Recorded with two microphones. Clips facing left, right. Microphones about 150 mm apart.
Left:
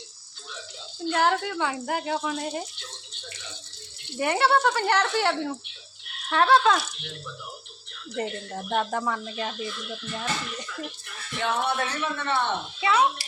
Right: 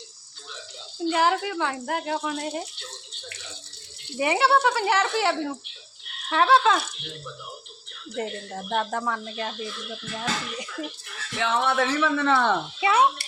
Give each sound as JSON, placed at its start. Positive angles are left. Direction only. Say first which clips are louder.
{"t": 1.0, "sound": "speech", "louder": "right 1 dB", "side_deg": -5}
{"t": 4.2, "sound": "speech", "louder": "right 1 dB", "side_deg": 0}
{"t": 8.1, "sound": "speech", "louder": "even", "side_deg": 0}
{"t": 11.2, "sound": "speech", "louder": "right 2 dB", "side_deg": -90}
{"t": 12.8, "sound": "speech", "louder": "right 1 dB", "side_deg": -25}